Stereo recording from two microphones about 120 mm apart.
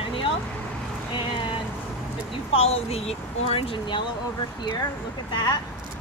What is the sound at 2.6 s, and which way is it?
Speech, 60° left (ahead or behind).